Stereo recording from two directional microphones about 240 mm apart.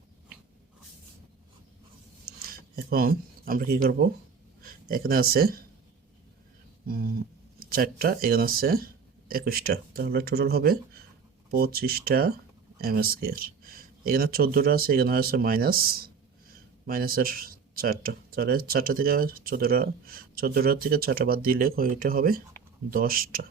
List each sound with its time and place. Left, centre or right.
2.7 s speech: right
6.8 s speech: right